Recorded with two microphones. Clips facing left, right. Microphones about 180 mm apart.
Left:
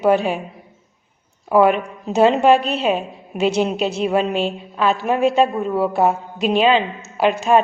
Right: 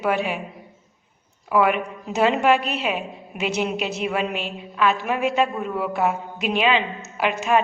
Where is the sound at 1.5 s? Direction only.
30° left (ahead or behind).